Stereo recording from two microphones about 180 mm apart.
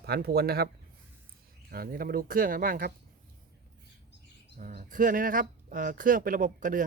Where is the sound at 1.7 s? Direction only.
55° right (ahead or behind).